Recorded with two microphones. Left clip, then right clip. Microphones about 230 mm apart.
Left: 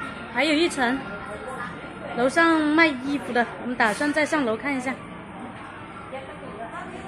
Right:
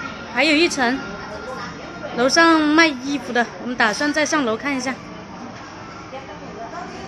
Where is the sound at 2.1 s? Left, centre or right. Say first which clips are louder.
Right 5 dB; centre.